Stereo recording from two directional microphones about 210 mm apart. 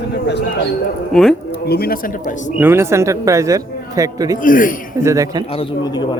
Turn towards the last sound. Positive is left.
turn(degrees=20)  # may be behind; listen again after turning